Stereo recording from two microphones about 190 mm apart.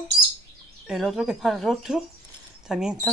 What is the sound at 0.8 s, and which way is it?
Speech, centre (ahead or behind).